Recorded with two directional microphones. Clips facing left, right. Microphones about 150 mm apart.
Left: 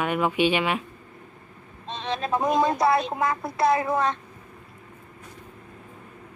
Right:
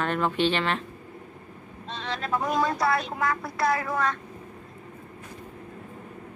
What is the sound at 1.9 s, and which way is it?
Speech, 20° left (ahead or behind).